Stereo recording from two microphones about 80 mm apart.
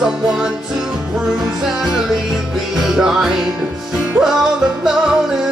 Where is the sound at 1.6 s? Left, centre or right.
Centre.